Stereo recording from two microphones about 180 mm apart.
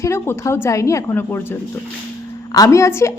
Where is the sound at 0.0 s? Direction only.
15° left (ahead or behind).